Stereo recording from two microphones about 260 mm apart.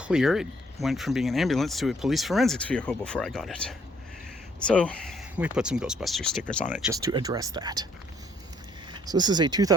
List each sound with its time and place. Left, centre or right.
0.0 s speech: centre
8.9 s speech: centre